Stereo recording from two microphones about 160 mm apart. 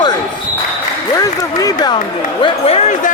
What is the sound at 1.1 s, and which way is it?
Applause, 20° left (ahead or behind).